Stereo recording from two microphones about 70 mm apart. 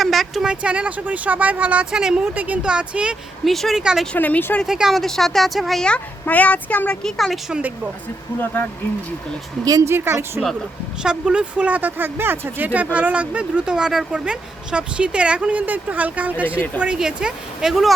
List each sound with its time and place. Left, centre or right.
0.0 s a sound: centre
0.4 s speech: centre
2.3 s speech: right
3.4 s speech: centre
3.8 s speech: centre
4.2 s speech: left
4.6 s speech: centre
6.2 s speech: left
7.0 s speech: centre
9.8 s speech: right
11.0 s speech: centre